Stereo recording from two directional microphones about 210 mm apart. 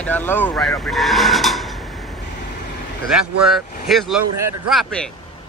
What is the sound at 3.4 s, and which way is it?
Speech, centre (ahead or behind).